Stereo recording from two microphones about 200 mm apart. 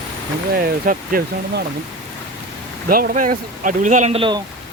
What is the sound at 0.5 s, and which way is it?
Speech, 45° right (ahead or behind).